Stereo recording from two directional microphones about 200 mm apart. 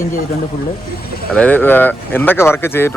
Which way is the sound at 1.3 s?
5° left (ahead or behind).